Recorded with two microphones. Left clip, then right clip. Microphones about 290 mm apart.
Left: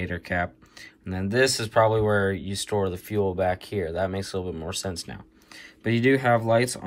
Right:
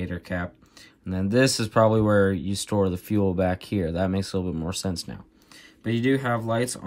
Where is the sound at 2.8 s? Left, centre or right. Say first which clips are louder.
Right 2 dB; centre.